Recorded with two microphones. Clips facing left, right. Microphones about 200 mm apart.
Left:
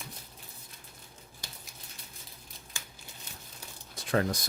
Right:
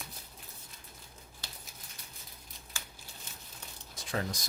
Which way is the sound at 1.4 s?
10° left (ahead or behind).